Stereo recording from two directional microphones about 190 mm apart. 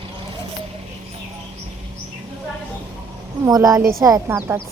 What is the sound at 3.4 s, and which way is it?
A woman's voice, 20° right (ahead or behind).